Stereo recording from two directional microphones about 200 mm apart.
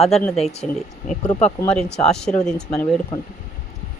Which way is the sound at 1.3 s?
35° left (ahead or behind).